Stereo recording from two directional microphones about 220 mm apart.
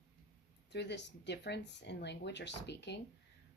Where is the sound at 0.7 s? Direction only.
50° left (ahead or behind).